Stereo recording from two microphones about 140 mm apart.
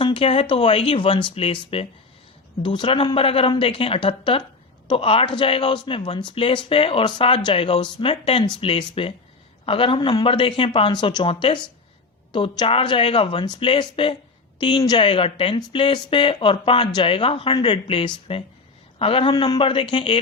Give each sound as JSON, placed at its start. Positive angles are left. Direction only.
{"t": 0.0, "sound": "speech", "side_deg": 40}